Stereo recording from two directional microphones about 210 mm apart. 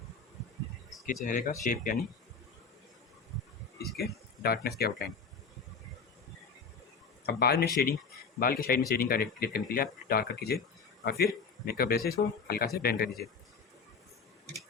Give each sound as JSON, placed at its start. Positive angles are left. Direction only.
{"t": 1.0, "sound": "speech", "side_deg": 40}
{"t": 4.4, "sound": "speech", "side_deg": 45}
{"t": 7.3, "sound": "a man's voice", "side_deg": 50}